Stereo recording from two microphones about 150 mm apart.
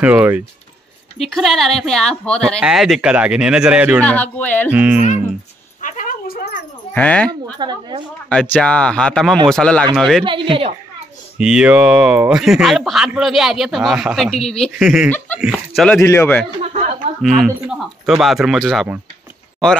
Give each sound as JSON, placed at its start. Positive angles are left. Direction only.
{"t": 0.0, "sound": "speech", "side_deg": -10}
{"t": 1.2, "sound": "speech", "side_deg": 0}
{"t": 2.6, "sound": "speech", "side_deg": -5}
{"t": 4.0, "sound": "speech", "side_deg": 10}
{"t": 4.7, "sound": "speech", "side_deg": -10}
{"t": 5.8, "sound": "a sound", "side_deg": 55}
{"t": 6.9, "sound": "speech", "side_deg": 10}
{"t": 7.5, "sound": "speech", "side_deg": -30}
{"t": 8.3, "sound": "speech", "side_deg": 5}
{"t": 10.2, "sound": "speech", "side_deg": -35}
{"t": 11.3, "sound": "speech", "side_deg": -5}
{"t": 16.0, "sound": "speech", "side_deg": 15}
{"t": 17.2, "sound": "speech", "side_deg": 0}